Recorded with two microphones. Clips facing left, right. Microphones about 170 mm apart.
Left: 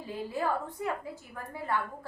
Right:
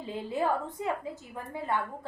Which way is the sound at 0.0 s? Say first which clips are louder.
Right 2 dB; 20° right (ahead or behind).